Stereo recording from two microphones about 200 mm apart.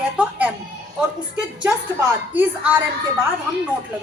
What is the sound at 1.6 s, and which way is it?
Speech, 10° right (ahead or behind).